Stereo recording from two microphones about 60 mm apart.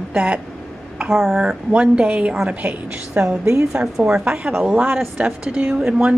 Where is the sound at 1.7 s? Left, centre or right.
Centre.